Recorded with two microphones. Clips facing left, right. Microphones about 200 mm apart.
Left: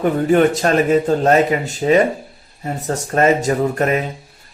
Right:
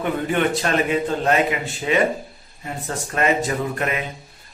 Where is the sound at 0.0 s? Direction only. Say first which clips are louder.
Left 7 dB; 40° left (ahead or behind).